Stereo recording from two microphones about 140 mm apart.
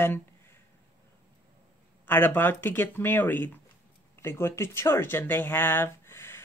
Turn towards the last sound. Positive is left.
turn(degrees=15)  # may be behind; listen again after turning